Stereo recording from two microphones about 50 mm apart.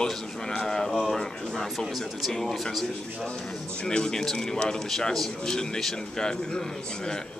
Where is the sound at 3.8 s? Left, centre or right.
Centre.